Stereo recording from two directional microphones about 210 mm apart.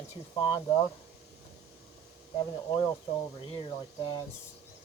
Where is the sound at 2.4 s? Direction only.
20° left (ahead or behind).